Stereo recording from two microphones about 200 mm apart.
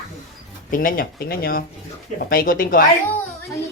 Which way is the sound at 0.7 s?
45° left (ahead or behind).